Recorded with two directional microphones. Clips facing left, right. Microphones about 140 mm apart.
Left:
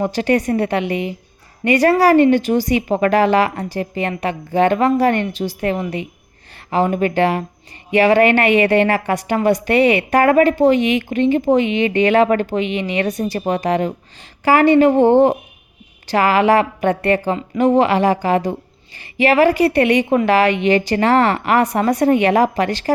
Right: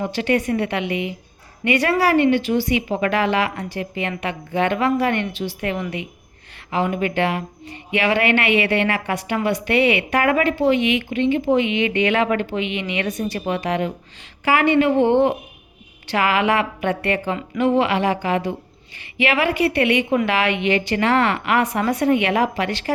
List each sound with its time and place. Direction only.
0.0 s speech: 40° left (ahead or behind)